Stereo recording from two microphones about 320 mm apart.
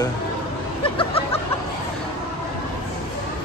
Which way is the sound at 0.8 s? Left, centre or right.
Centre.